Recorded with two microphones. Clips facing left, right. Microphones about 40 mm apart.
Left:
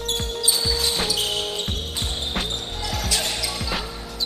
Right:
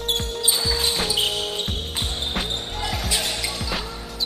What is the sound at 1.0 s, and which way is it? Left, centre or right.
Basketball bounce, centre.